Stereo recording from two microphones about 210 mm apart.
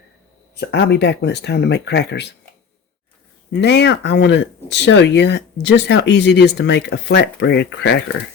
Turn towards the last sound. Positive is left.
turn(degrees=55)  # may be behind; listen again after turning